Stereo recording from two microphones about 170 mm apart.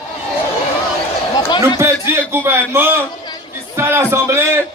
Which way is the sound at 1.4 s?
25° left (ahead or behind).